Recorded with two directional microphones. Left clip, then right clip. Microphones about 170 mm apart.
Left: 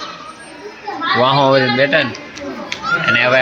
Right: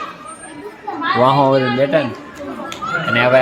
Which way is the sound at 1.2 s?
5° right (ahead or behind).